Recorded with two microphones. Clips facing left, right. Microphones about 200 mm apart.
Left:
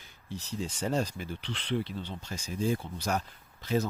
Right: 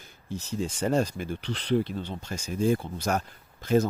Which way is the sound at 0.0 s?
45° right (ahead or behind).